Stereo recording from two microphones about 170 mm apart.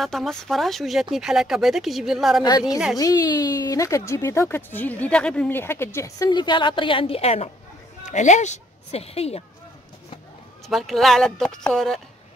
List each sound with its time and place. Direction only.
0.0 s speech: centre (ahead or behind)
3.0 s a woman's voice: 20° left (ahead or behind); by 9.4 s 35° left (ahead or behind)
10.7 s speech: centre (ahead or behind)